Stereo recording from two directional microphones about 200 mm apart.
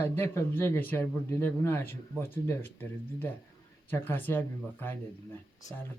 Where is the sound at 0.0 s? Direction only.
10° left (ahead or behind).